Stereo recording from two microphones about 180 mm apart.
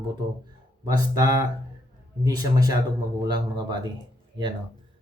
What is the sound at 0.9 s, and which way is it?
Speech, 20° right (ahead or behind).